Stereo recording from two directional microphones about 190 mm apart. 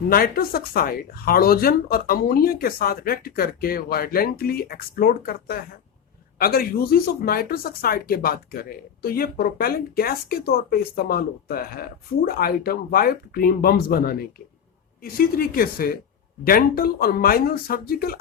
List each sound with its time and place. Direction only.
0.1 s speech: 50° left (ahead or behind)